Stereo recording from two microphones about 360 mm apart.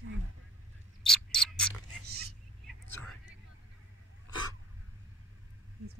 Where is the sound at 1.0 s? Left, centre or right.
Centre.